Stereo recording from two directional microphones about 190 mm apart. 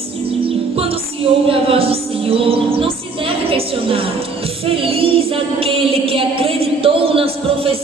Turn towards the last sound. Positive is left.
turn(degrees=-30)  # may be behind; listen again after turning